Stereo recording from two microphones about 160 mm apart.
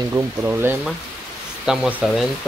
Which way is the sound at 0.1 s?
15° right (ahead or behind).